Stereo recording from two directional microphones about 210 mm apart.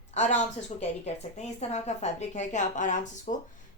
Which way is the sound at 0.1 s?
35° left (ahead or behind).